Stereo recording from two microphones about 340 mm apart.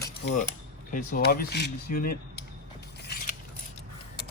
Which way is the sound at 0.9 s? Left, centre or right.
Left.